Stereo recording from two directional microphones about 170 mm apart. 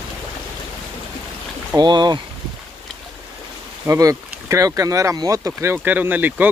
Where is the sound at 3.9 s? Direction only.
20° right (ahead or behind).